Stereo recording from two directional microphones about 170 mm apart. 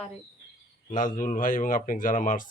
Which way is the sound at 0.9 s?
50° left (ahead or behind).